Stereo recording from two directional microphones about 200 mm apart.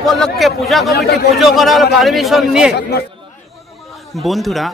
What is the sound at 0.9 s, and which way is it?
Speech, 50° left (ahead or behind).